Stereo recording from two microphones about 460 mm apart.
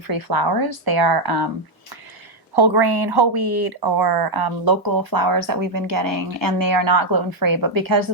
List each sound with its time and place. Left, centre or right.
0.1 s speech: right
2.6 s speech: right